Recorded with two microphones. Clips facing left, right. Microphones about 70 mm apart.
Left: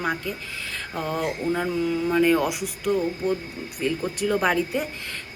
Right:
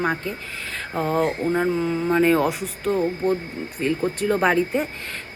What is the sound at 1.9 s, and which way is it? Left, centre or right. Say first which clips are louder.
Speech: right 1 dB; centre.